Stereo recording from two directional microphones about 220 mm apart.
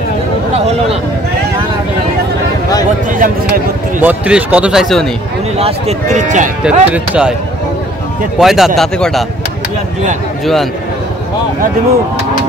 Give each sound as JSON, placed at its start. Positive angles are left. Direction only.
{"t": 3.1, "sound": "speech", "side_deg": -40}
{"t": 4.0, "sound": "speech", "side_deg": -5}
{"t": 5.6, "sound": "speech", "side_deg": -25}
{"t": 6.6, "sound": "speech", "side_deg": -5}
{"t": 8.4, "sound": "speech", "side_deg": 0}
{"t": 10.4, "sound": "speech", "side_deg": 0}